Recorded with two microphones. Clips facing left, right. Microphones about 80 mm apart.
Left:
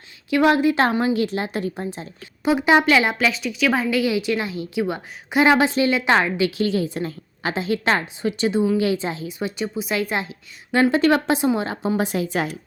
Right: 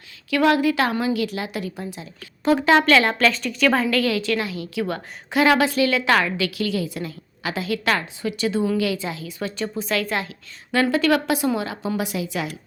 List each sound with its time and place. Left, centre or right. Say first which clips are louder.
0.3 s a woman's voice: left 1 dB; left
2.4 s a woman's voice: even; centre
8.8 s a woman's voice: left 3 dB; left
9.4 s a woman's voice: even; centre; by 12.5 s left